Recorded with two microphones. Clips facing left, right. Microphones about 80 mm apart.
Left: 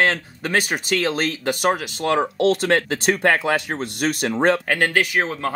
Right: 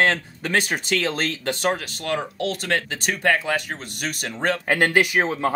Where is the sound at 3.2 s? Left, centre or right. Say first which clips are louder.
Even; left.